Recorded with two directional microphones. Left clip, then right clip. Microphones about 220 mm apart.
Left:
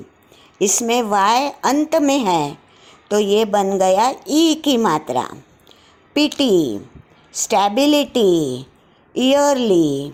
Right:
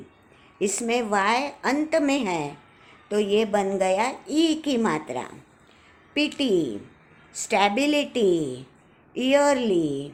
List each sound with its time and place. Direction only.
0.6 s a woman's voice: 30° left (ahead or behind)